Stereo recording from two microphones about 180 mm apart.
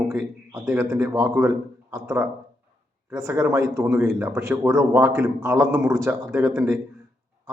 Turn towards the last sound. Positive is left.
turn(degrees=-15)  # may be behind; listen again after turning